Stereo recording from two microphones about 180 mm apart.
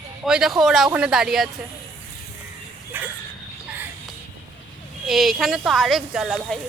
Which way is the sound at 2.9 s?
10° right (ahead or behind).